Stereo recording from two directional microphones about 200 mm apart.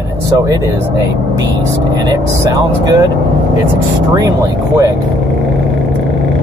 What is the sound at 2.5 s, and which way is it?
Speech, 20° right (ahead or behind).